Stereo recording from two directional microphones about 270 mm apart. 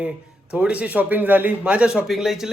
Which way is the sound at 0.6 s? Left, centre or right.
Centre.